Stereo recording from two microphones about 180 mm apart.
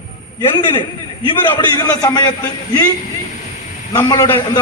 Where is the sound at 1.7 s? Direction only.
20° left (ahead or behind).